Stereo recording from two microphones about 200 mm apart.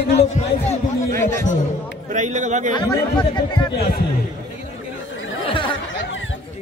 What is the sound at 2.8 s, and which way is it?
Speech, 20° left (ahead or behind).